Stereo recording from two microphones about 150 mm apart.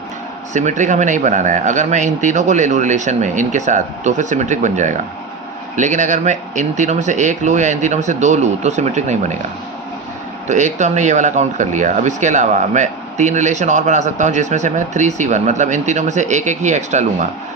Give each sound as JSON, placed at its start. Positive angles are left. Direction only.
{"t": 0.5, "sound": "speech", "side_deg": -55}
{"t": 10.5, "sound": "speech", "side_deg": -55}